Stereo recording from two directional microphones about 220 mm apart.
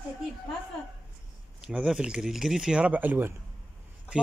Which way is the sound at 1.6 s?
5° right (ahead or behind).